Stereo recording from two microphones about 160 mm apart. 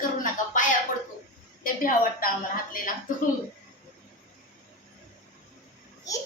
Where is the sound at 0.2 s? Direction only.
55° left (ahead or behind).